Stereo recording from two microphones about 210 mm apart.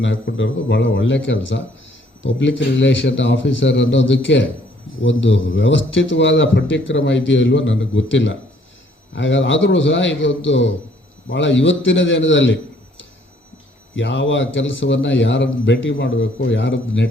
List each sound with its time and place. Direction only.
0.0 s a man's voice: 60° left (ahead or behind)
13.9 s a man's voice: 60° left (ahead or behind)